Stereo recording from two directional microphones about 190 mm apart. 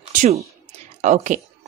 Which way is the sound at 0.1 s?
40° right (ahead or behind).